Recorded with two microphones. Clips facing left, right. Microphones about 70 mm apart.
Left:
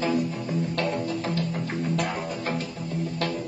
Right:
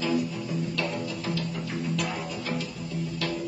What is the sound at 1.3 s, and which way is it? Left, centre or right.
Music, left.